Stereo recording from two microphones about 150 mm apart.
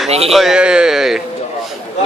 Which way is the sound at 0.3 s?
Centre (ahead or behind).